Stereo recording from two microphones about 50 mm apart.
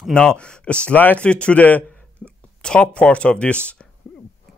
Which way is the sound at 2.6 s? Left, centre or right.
Centre.